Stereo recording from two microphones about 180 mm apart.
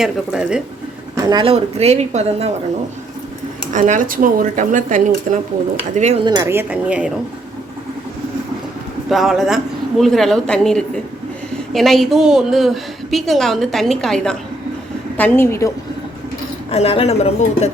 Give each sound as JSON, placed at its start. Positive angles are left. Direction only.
{"t": 0.0, "sound": "a woman's voice", "side_deg": -5}
{"t": 1.1, "sound": "speech", "side_deg": -25}
{"t": 3.7, "sound": "speech", "side_deg": -45}
{"t": 6.2, "sound": "a woman's voice", "side_deg": -20}
{"t": 9.0, "sound": "a woman's voice", "side_deg": 0}
{"t": 15.2, "sound": "a woman's voice", "side_deg": 15}
{"t": 16.7, "sound": "speech", "side_deg": 35}